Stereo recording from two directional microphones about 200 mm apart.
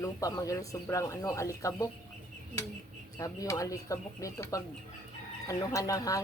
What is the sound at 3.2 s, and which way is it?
Speech, 15° left (ahead or behind).